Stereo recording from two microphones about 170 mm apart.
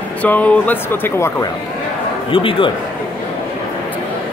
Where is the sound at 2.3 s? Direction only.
30° left (ahead or behind).